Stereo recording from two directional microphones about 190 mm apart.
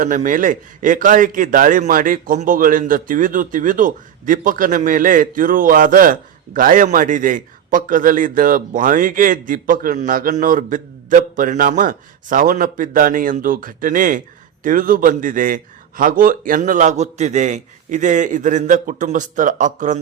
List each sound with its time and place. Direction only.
0.0 s a man's voice: 45° right (ahead or behind)